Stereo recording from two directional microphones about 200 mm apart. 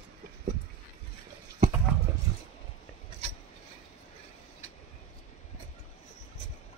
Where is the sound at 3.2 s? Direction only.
30° right (ahead or behind).